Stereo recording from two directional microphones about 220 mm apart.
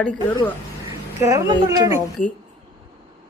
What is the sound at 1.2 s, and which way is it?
Speech, 15° right (ahead or behind).